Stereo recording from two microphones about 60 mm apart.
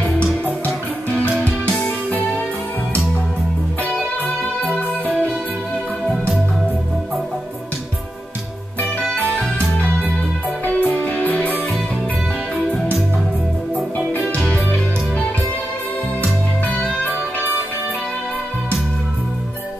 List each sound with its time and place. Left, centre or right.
10.6 s music: left
14.1 s music: centre
16.6 s music: left